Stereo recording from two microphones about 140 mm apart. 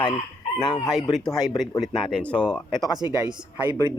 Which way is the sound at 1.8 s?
5° left (ahead or behind).